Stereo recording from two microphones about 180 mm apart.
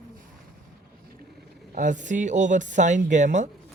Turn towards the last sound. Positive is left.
turn(degrees=-40)  # may be behind; listen again after turning